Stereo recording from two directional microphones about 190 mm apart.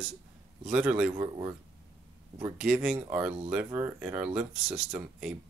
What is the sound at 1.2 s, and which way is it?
Speech, 20° right (ahead or behind).